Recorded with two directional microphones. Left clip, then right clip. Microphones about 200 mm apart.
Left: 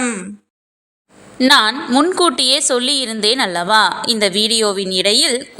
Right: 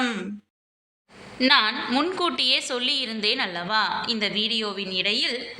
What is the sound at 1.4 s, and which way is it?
A woman's voice, 45° left (ahead or behind).